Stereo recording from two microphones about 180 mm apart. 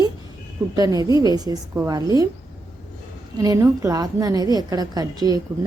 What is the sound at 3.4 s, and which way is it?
A woman's voice, 20° right (ahead or behind).